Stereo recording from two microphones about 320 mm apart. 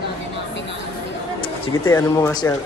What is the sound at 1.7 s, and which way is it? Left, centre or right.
Speech, centre.